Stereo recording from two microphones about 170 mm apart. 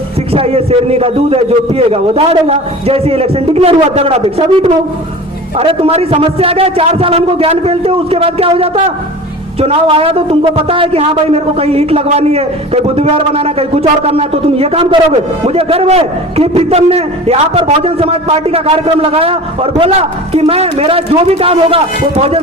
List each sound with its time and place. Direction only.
0.3 s a man's voice: 35° right (ahead or behind)